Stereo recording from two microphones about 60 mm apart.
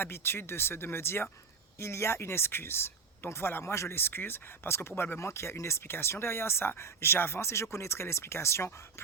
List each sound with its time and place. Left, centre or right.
0.0 s speech: left